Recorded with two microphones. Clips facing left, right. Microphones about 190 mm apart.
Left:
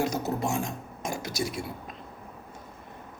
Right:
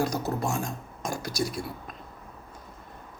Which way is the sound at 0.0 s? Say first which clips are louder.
Even; 20° left (ahead or behind).